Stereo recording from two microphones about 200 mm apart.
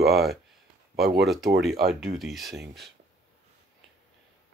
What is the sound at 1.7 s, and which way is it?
Speech, 50° right (ahead or behind).